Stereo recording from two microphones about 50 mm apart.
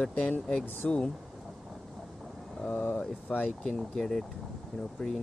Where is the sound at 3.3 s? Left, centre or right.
Centre.